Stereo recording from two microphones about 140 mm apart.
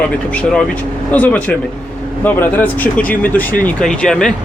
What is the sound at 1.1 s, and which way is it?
Speech, 10° left (ahead or behind).